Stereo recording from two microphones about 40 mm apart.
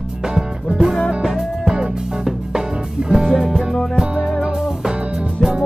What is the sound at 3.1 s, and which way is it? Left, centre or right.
Music, centre.